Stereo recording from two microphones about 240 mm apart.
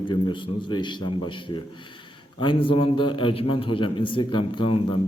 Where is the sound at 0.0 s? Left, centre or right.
Centre.